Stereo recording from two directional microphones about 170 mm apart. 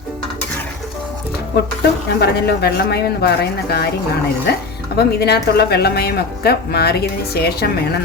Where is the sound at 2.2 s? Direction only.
70° left (ahead or behind).